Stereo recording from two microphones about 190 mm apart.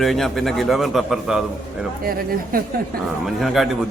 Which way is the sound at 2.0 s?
50° right (ahead or behind).